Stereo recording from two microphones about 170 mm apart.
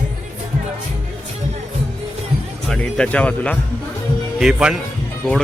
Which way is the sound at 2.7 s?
5° left (ahead or behind).